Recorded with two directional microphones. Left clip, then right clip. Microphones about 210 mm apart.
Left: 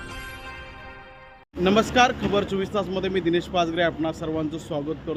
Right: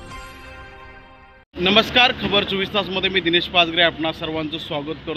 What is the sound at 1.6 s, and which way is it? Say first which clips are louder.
Speech: right 4 dB; 10° left (ahead or behind).